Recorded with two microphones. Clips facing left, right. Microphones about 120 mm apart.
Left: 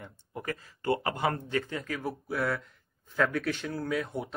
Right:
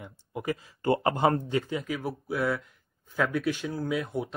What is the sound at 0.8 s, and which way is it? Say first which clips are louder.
Speech: right 5 dB; 25° right (ahead or behind).